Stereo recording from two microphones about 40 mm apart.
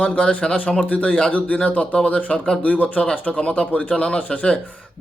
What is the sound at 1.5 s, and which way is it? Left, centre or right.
A man's voice, left.